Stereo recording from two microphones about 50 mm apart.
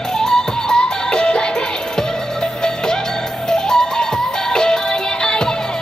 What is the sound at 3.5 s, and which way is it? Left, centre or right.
Music, centre.